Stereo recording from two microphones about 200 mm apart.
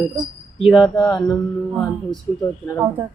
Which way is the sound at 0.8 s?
20° left (ahead or behind).